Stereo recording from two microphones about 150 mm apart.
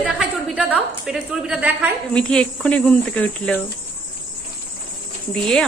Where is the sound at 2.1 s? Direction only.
5° left (ahead or behind).